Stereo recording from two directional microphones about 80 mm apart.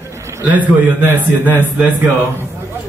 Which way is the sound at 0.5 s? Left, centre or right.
Right.